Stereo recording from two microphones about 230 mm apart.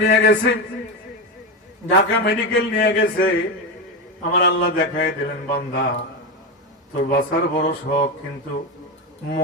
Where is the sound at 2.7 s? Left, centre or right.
Left.